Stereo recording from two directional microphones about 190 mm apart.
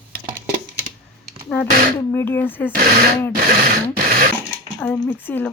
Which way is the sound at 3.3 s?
50° right (ahead or behind).